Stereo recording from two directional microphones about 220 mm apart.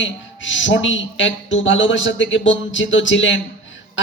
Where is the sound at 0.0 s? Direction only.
60° left (ahead or behind).